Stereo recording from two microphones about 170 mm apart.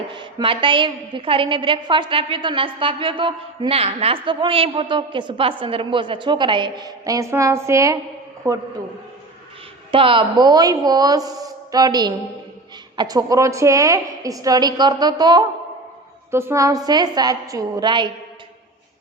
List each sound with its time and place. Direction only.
0.1 s a woman's voice: 30° right (ahead or behind)
9.9 s a woman's voice: 30° right (ahead or behind)